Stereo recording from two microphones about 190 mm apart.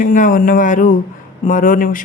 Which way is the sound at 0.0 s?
45° left (ahead or behind).